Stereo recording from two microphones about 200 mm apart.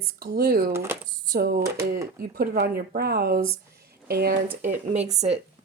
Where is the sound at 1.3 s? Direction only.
50° right (ahead or behind).